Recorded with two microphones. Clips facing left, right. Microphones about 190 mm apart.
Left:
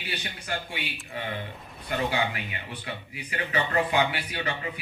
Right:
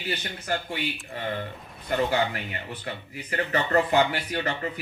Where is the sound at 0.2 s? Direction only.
45° right (ahead or behind).